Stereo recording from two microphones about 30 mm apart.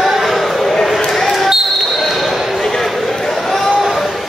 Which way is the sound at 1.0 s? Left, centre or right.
Centre.